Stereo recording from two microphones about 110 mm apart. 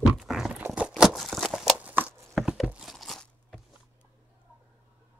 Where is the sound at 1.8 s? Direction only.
15° right (ahead or behind).